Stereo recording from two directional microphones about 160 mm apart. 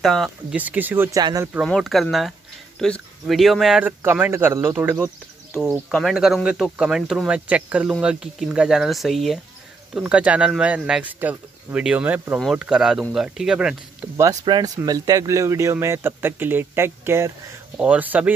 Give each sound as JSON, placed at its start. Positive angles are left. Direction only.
{"t": 0.0, "sound": "speech", "side_deg": 0}
{"t": 0.6, "sound": "a man's voice", "side_deg": -10}
{"t": 1.7, "sound": "speech", "side_deg": 0}
{"t": 4.0, "sound": "a man's voice", "side_deg": -15}
{"t": 5.6, "sound": "a man's voice", "side_deg": 0}
{"t": 14.4, "sound": "a man's voice", "side_deg": -30}